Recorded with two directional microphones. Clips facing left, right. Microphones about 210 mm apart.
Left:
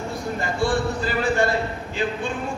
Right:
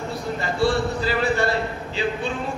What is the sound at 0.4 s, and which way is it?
Speech, 50° left (ahead or behind).